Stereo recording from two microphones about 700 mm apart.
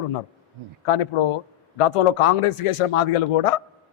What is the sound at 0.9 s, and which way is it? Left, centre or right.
A man's voice, left.